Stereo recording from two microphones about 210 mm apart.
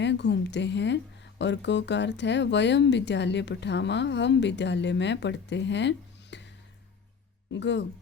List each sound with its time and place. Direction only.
0.0 s speech: 55° left (ahead or behind)
6.3 s music: 55° left (ahead or behind)
7.5 s speech: 55° left (ahead or behind)